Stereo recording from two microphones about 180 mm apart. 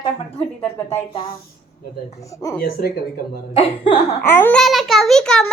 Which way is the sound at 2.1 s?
20° left (ahead or behind).